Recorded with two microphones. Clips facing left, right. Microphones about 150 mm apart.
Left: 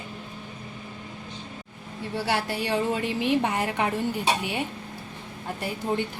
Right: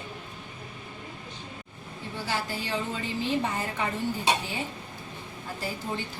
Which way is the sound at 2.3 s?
65° left (ahead or behind).